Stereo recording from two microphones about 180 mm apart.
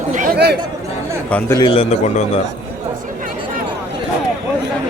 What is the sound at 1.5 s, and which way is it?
Speech, 30° left (ahead or behind).